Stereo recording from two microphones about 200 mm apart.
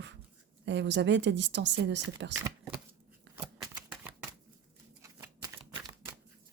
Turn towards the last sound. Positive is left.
turn(degrees=-15)  # may be behind; listen again after turning